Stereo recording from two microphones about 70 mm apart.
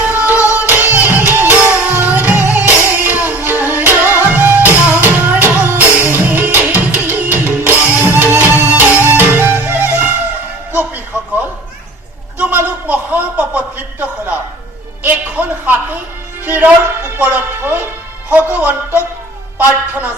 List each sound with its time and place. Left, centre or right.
0.0 s music: right
0.3 s music: left
0.6 s music: right
12.4 s a sound: right
15.0 s music: right
19.5 s a sound: right